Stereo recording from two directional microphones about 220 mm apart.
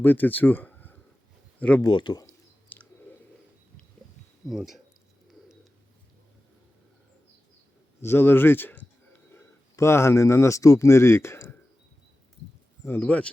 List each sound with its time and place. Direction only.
0.0 s speech: 10° left (ahead or behind)
1.8 s clicking: 20° left (ahead or behind)
4.4 s speech: centre (ahead or behind)
8.0 s speech: 10° left (ahead or behind)
12.8 s speech: 10° left (ahead or behind)